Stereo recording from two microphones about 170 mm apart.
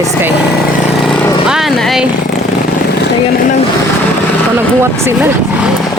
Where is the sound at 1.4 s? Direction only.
Centre (ahead or behind).